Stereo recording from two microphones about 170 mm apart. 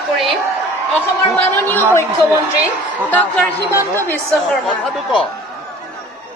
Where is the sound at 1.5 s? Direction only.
10° left (ahead or behind).